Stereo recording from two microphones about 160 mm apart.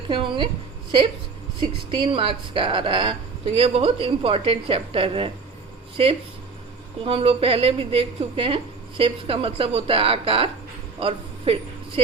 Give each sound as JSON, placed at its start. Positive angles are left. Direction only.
{"t": 0.1, "sound": "a woman's voice", "side_deg": -30}